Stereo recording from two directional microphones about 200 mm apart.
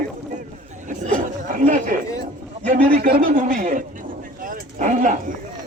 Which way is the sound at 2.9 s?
50° right (ahead or behind).